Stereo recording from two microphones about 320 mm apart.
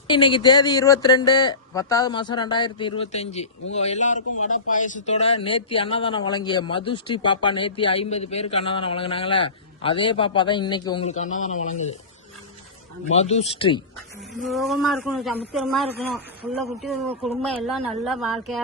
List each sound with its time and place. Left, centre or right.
0.1 s a man's voice: centre
13.1 s speech: centre
14.4 s speech: centre